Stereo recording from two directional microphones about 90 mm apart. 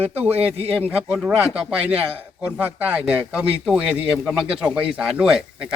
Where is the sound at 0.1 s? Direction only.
20° right (ahead or behind).